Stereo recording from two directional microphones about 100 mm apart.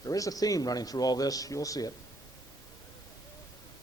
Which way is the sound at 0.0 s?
35° left (ahead or behind).